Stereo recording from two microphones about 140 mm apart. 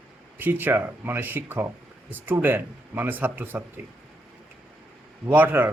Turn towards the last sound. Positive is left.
turn(degrees=-15)  # may be behind; listen again after turning